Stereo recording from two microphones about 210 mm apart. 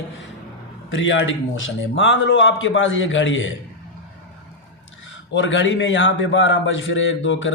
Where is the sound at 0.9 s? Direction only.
65° left (ahead or behind).